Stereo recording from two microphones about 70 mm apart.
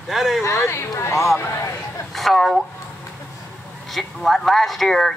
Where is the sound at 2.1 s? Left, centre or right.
Centre.